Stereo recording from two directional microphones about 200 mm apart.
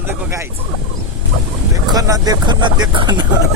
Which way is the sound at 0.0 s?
15° right (ahead or behind).